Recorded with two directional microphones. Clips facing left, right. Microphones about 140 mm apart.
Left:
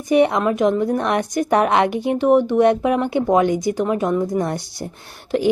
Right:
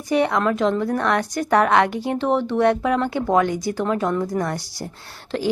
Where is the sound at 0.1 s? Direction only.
20° left (ahead or behind).